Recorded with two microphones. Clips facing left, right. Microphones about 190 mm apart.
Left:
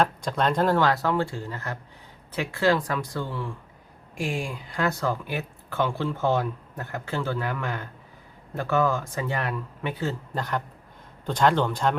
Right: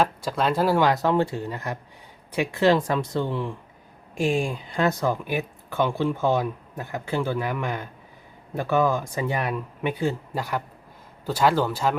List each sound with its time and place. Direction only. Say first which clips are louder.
0.0 s speech: right 1 dB; 5° right (ahead or behind)